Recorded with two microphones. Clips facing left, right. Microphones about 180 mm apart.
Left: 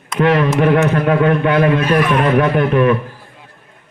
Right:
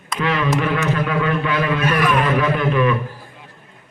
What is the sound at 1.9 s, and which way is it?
Speech, 30° left (ahead or behind).